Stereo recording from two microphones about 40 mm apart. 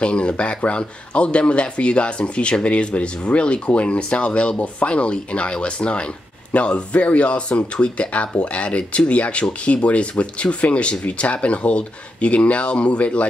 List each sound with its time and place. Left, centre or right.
0.0 s speech: left